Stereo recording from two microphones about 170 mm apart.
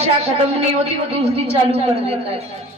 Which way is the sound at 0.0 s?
40° right (ahead or behind).